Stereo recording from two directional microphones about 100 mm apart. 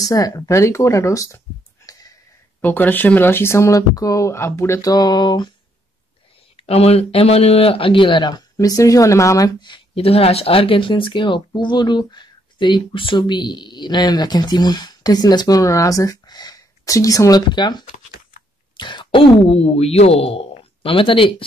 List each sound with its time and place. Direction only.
0.0 s speech: 35° left (ahead or behind)
1.9 s a sound: 35° left (ahead or behind)
2.6 s speech: 20° left (ahead or behind); by 5.5 s 45° left (ahead or behind)
6.5 s speech: 85° left; by 8.5 s 45° left (ahead or behind)
8.5 s speech: 35° left (ahead or behind)
9.9 s speech: 75° left (ahead or behind)